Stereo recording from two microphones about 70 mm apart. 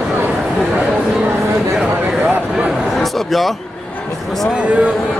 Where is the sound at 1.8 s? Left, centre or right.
Centre.